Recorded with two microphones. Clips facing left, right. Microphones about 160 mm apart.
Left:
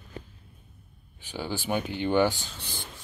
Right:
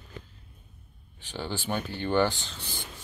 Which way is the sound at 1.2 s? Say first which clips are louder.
Left 1 dB; 10° left (ahead or behind).